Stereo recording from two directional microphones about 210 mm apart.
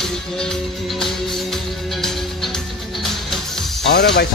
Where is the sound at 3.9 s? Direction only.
50° left (ahead or behind).